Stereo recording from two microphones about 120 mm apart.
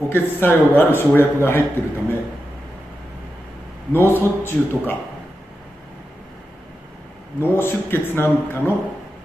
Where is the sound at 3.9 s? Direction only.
20° left (ahead or behind).